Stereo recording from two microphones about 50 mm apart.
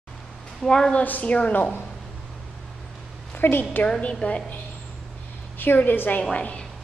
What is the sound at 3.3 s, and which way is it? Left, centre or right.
Speech, left.